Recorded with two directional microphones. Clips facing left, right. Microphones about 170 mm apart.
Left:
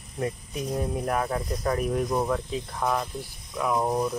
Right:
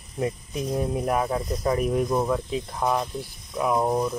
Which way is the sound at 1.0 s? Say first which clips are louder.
Right 3 dB; 10° right (ahead or behind).